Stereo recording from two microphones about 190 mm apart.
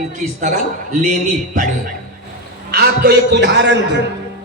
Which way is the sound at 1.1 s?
45° right (ahead or behind).